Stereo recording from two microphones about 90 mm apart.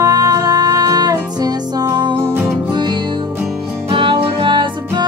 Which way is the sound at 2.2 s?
25° right (ahead or behind).